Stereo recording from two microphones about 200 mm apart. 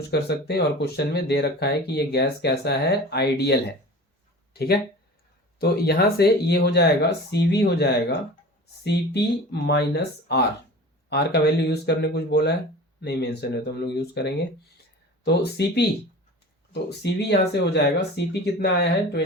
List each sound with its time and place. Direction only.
0.1 s speech: 55° left (ahead or behind)